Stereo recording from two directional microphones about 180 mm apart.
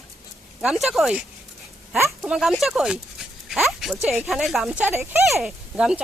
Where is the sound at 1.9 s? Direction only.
10° right (ahead or behind).